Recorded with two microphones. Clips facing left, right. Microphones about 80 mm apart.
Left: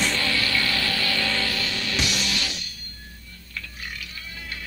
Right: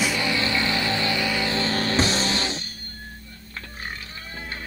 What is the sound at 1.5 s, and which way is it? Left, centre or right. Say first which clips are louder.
Music: right 6 dB; right.